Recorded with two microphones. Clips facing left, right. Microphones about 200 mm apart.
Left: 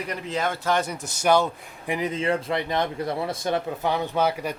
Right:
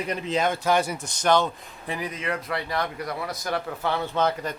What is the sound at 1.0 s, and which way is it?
Speech, 10° left (ahead or behind).